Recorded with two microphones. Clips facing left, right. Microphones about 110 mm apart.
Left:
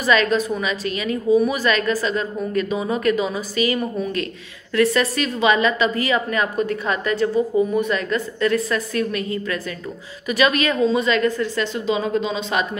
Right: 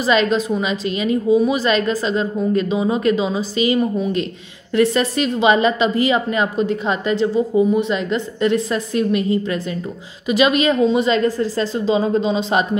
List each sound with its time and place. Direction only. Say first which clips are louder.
0.0 s a woman's voice: right 2 dB; 30° right (ahead or behind)